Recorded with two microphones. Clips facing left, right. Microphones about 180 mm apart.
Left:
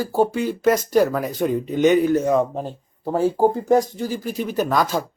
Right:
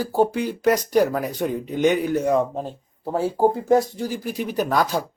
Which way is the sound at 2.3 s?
5° left (ahead or behind).